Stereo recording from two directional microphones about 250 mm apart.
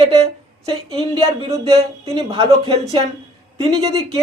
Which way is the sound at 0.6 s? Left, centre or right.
Right.